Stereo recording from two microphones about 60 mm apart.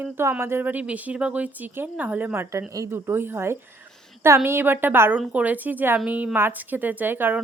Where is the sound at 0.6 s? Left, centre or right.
Right.